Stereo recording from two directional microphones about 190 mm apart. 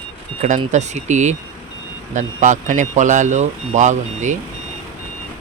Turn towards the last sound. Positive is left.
turn(degrees=-40)  # may be behind; listen again after turning